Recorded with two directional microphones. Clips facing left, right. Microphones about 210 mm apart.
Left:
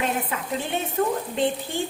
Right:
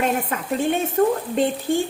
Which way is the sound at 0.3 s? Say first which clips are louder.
Right 3 dB; 45° right (ahead or behind).